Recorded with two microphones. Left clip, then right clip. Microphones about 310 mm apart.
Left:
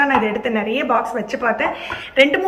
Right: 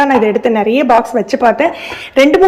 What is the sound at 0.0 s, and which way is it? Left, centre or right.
Speech, centre.